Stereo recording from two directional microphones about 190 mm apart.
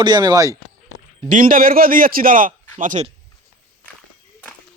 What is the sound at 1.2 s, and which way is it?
A man's voice, 45° right (ahead or behind).